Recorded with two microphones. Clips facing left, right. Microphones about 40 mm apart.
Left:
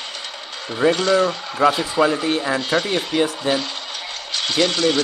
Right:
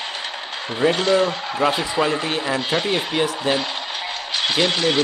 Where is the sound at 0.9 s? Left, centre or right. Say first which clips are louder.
Even; right.